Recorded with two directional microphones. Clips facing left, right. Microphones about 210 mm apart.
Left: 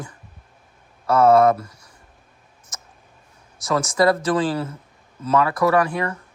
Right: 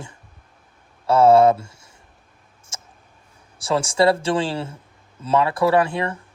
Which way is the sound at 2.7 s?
25° right (ahead or behind).